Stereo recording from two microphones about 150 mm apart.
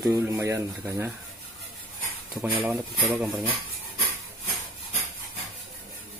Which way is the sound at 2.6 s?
Centre (ahead or behind).